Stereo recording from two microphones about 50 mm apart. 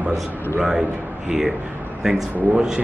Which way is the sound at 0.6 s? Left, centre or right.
Centre.